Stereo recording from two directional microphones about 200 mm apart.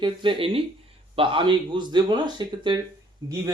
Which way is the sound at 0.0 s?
25° right (ahead or behind).